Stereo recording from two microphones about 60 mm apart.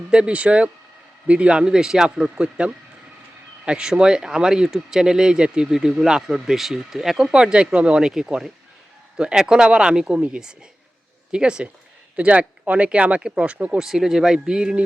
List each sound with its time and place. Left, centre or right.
0.1 s speech: centre
2.3 s speech: centre